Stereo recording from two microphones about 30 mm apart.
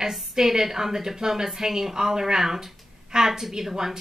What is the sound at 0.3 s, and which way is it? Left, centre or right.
A woman's voice, centre.